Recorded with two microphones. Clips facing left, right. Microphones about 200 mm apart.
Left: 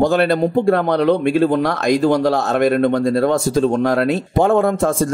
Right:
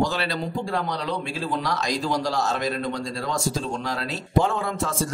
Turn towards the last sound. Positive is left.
turn(degrees=55)  # may be behind; listen again after turning